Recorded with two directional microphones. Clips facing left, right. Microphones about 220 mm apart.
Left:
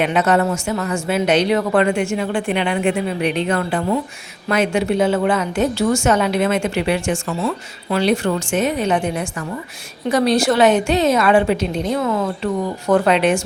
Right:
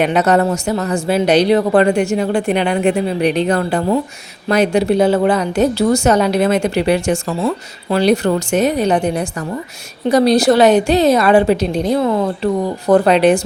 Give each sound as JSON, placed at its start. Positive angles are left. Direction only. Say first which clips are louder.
{"t": 0.0, "sound": "a woman's voice", "louder": "right 3 dB", "side_deg": -40}